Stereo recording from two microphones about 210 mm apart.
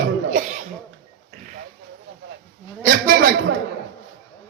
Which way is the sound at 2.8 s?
45° right (ahead or behind).